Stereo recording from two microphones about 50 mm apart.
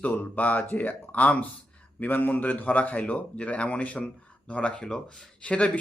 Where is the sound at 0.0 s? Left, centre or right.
Left.